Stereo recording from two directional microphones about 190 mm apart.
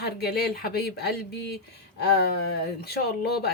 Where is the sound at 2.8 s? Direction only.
55° left (ahead or behind).